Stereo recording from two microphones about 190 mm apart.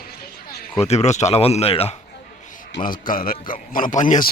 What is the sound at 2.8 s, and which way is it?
A man's voice, 45° left (ahead or behind).